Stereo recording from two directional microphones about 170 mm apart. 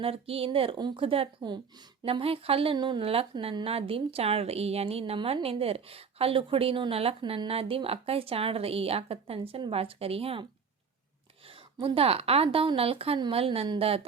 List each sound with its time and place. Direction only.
0.0 s a woman's voice: 35° right (ahead or behind)
11.4 s a woman's voice: 30° right (ahead or behind)